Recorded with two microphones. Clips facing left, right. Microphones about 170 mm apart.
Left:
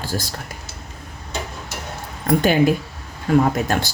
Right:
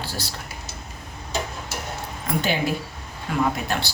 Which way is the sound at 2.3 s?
50° left (ahead or behind).